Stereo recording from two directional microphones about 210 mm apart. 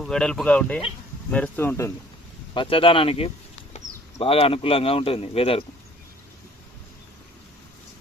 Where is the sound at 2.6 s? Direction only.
25° left (ahead or behind).